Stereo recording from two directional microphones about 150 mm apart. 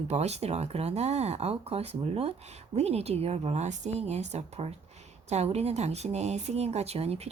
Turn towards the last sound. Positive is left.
turn(degrees=-45)  # may be behind; listen again after turning